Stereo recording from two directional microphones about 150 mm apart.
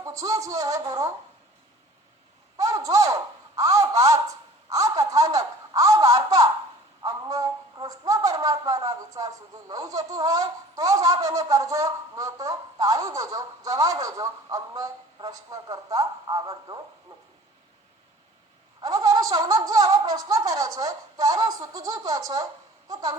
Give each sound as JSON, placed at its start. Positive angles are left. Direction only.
{"t": 0.0, "sound": "speech", "side_deg": -20}
{"t": 2.6, "sound": "a sound", "side_deg": -20}
{"t": 7.0, "sound": "speech", "side_deg": -25}
{"t": 18.8, "sound": "speech", "side_deg": -25}